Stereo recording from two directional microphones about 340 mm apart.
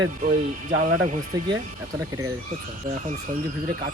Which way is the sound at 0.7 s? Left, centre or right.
Right.